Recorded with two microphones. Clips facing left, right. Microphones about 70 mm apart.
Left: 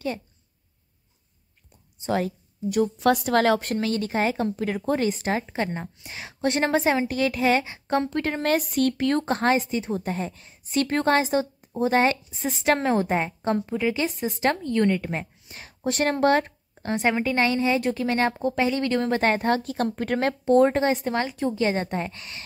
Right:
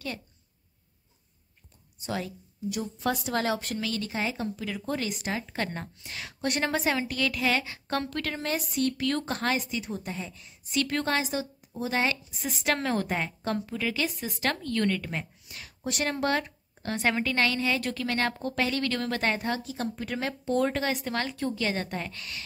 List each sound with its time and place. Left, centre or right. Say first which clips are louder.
2.0 s speech: left 8 dB; left
2.8 s a woman's voice: left 10 dB; left
3.6 s a woman's voice: left 6 dB; left
5.5 s a woman's voice: left 5 dB; centre
8.4 s speech: left 7 dB; left
9.0 s a woman's voice: left 6 dB; left
16.8 s a woman's voice: left 4 dB; left
19.5 s a woman's voice: left 7 dB; left